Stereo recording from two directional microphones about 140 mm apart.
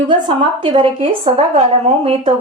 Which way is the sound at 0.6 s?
35° right (ahead or behind).